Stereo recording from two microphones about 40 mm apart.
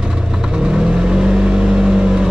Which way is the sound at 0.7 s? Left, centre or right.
Centre.